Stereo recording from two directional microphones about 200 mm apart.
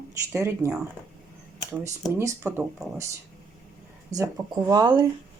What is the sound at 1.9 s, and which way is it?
Speech, 15° right (ahead or behind).